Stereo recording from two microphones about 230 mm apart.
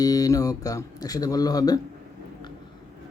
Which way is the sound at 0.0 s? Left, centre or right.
Centre.